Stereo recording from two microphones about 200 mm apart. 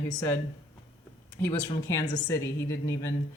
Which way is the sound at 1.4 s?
15° left (ahead or behind).